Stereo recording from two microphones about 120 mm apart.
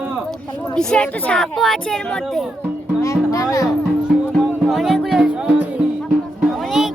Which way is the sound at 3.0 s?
25° left (ahead or behind).